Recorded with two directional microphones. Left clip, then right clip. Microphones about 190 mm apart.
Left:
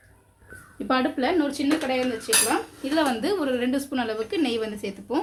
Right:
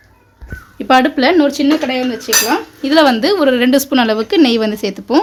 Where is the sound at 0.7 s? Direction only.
25° right (ahead or behind).